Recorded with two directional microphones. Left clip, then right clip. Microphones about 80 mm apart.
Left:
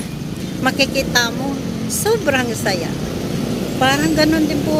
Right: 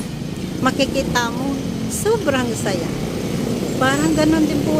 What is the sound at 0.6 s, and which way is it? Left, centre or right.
Speech, right.